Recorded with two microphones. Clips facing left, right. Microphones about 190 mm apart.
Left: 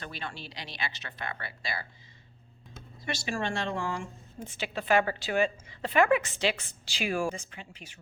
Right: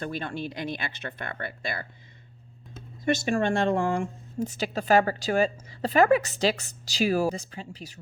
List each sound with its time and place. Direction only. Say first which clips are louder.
0.0 s speech: right 9 dB; 50° right (ahead or behind)
3.0 s speech: right 9 dB; 50° right (ahead or behind)
4.4 s a woman's voice: right 7 dB; 40° right (ahead or behind)